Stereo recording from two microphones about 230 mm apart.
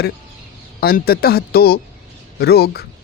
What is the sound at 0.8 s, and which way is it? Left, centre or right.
A man's voice, left.